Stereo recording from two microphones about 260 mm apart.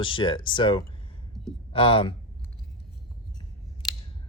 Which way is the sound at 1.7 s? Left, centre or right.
Left.